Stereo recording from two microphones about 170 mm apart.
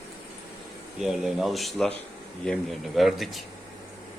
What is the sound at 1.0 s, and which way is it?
Speech, 5° right (ahead or behind).